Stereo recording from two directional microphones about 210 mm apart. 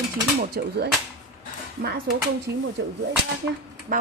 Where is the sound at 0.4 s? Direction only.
45° right (ahead or behind).